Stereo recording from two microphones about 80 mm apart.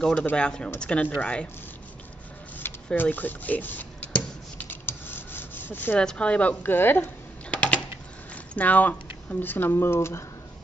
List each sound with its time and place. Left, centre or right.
0.0 s a woman's voice: centre
2.6 s a sound: left
4.8 s rub: left
5.9 s a woman's voice: centre
7.5 s typing: centre
8.5 s speech: centre